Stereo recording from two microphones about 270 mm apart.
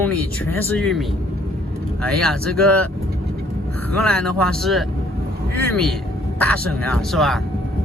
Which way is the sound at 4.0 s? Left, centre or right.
Centre.